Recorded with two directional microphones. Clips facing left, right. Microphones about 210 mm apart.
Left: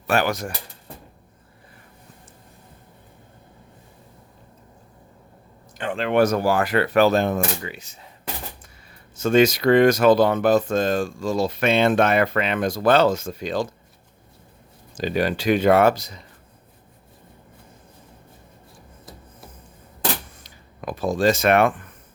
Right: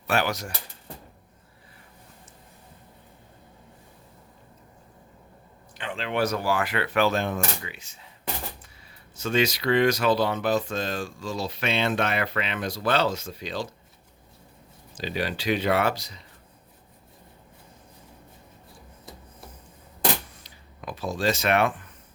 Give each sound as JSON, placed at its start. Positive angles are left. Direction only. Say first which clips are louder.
{"t": 0.1, "sound": "speech", "louder": "left 4 dB", "side_deg": 50}
{"t": 5.7, "sound": "speech", "louder": "left 8 dB", "side_deg": 50}
{"t": 9.1, "sound": "speech", "louder": "left 8 dB", "side_deg": 50}
{"t": 14.9, "sound": "speech", "louder": "left 7 dB", "side_deg": 50}
{"t": 20.4, "sound": "a sound", "louder": "left 6 dB", "side_deg": 50}